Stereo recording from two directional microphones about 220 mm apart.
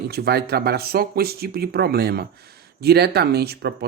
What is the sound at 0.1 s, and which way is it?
Speech, 45° right (ahead or behind).